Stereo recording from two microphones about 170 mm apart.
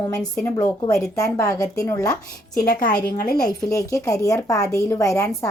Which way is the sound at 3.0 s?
60° left (ahead or behind).